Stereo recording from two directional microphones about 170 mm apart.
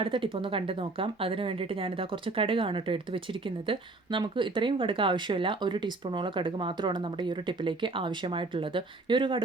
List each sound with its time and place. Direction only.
0.0 s a woman's voice: 30° right (ahead or behind)